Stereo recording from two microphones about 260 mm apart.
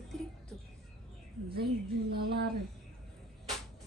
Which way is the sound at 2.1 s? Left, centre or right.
Right.